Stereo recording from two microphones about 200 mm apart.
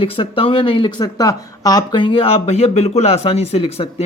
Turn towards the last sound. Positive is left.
turn(degrees=30)  # may be behind; listen again after turning